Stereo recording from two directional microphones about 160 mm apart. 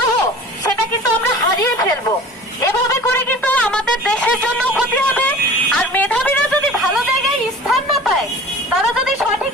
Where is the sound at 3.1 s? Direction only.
10° left (ahead or behind).